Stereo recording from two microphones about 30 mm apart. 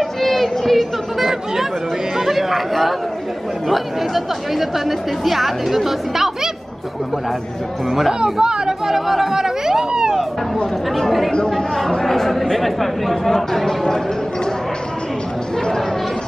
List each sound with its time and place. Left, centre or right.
0.0 s a sound: centre
2.1 s speech: centre
8.1 s speech: right
8.8 s speech: centre
11.1 s speech: centre